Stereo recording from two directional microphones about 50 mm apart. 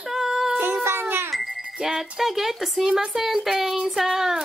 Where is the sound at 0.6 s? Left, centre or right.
Right.